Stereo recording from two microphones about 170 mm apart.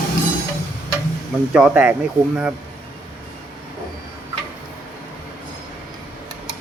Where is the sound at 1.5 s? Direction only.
10° right (ahead or behind).